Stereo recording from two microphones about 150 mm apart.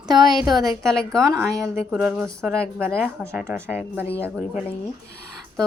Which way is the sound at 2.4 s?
5° right (ahead or behind).